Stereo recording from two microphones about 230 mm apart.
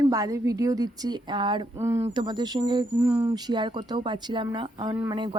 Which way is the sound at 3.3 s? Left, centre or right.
Centre.